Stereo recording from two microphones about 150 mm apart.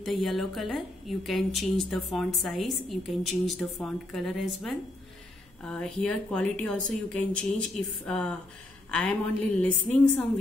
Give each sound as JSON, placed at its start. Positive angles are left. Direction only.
{"t": 0.0, "sound": "a woman's voice", "side_deg": 0}
{"t": 9.6, "sound": "speech", "side_deg": 10}